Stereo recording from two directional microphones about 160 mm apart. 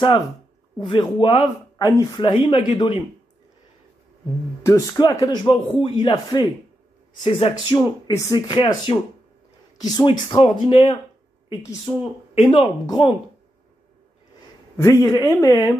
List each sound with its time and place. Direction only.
0.8 s speech: 30° left (ahead or behind)
4.6 s speech: 20° left (ahead or behind)
8.1 s speech: 25° left (ahead or behind)
14.8 s speech: 20° left (ahead or behind)